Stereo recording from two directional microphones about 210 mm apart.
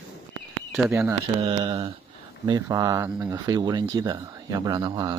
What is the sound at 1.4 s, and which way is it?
Speech, 25° right (ahead or behind).